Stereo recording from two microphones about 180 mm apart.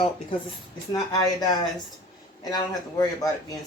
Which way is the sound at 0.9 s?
20° left (ahead or behind).